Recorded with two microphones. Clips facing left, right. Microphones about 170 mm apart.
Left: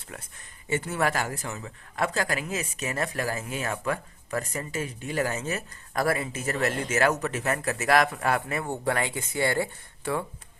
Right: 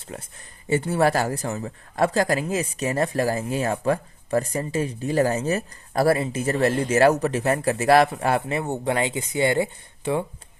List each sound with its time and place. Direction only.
0.1 s speech: 35° right (ahead or behind)